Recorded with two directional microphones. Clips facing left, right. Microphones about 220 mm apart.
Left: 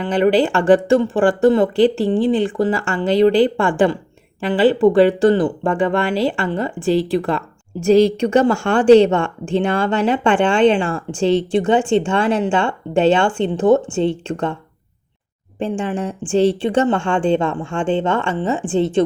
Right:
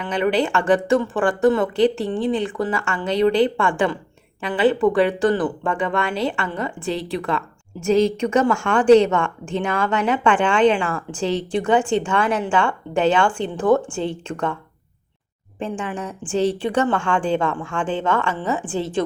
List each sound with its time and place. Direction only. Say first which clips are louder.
0.0 s speech: left 5 dB; 30° left (ahead or behind)
15.8 s speech: left 6 dB; 30° left (ahead or behind)